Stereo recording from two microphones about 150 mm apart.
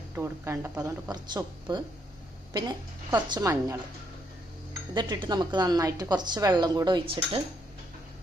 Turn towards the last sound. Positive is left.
turn(degrees=-35)  # may be behind; listen again after turning